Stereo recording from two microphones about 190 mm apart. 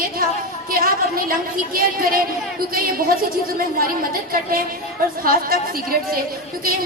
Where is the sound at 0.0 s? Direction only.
50° right (ahead or behind).